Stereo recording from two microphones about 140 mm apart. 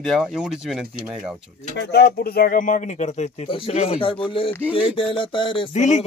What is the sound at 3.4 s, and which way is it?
Speech, 40° left (ahead or behind).